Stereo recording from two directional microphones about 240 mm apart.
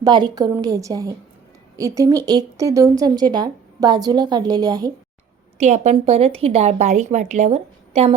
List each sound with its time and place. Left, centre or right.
0.0 s speech: centre
5.5 s speech: right